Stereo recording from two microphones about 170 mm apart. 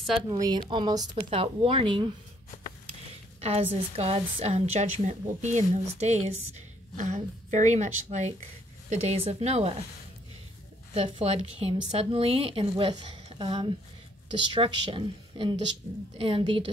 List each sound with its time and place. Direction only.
0.3 s speech: 25° right (ahead or behind)
3.3 s a woman's voice: 35° right (ahead or behind)
11.0 s a woman's voice: 35° right (ahead or behind)